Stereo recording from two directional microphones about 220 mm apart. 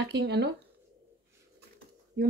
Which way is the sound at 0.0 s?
50° right (ahead or behind).